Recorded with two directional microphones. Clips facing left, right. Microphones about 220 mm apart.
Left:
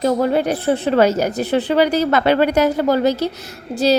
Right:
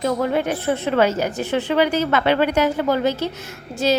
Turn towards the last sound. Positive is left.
turn(degrees=35)  # may be behind; listen again after turning